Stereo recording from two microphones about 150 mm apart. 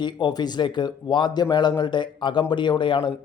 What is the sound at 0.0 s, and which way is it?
Speech, 30° left (ahead or behind).